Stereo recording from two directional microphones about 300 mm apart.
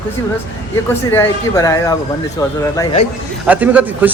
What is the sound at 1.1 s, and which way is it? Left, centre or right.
A woman's voice, centre.